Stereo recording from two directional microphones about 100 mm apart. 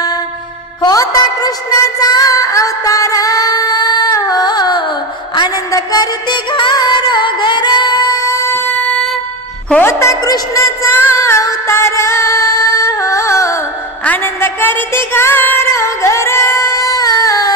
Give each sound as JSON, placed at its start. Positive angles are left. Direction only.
{"t": 0.8, "sound": "a sound", "side_deg": 40}
{"t": 5.7, "sound": "music", "side_deg": 40}
{"t": 8.6, "sound": "music", "side_deg": 15}
{"t": 9.8, "sound": "a woman's voice", "side_deg": 30}
{"t": 10.9, "sound": "music", "side_deg": 20}
{"t": 14.0, "sound": "a sound", "side_deg": 20}